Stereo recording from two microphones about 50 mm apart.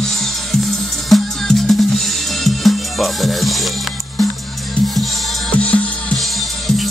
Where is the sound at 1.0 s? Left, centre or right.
Centre.